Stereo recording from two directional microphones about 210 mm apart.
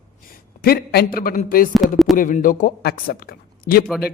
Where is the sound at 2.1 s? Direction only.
40° left (ahead or behind).